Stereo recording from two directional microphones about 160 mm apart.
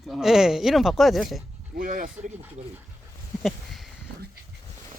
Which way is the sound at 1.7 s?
55° right (ahead or behind).